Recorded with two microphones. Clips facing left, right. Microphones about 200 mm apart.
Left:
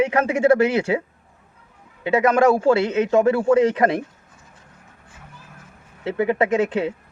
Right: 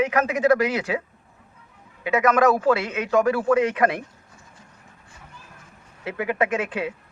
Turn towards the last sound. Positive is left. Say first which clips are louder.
# left 5 dB
turn(degrees=25)  # may be behind; listen again after turning